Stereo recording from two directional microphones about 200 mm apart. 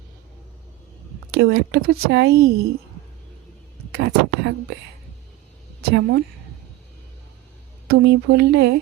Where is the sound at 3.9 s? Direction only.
55° right (ahead or behind).